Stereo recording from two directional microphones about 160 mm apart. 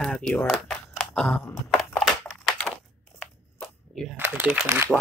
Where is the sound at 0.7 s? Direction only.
10° left (ahead or behind).